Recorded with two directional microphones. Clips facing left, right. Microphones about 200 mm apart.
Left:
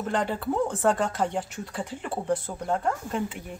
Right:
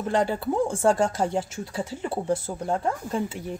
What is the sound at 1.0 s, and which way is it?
Speech, 25° right (ahead or behind).